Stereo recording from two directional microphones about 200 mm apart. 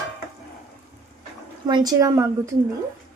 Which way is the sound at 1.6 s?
20° right (ahead or behind).